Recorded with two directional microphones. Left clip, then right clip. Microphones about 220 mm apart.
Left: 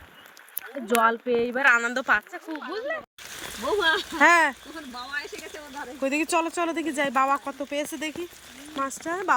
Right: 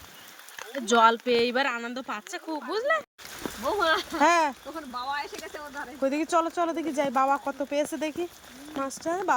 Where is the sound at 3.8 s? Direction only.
Centre (ahead or behind).